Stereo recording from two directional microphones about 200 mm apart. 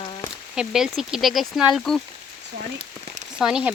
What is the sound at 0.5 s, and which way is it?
Speech, 5° right (ahead or behind).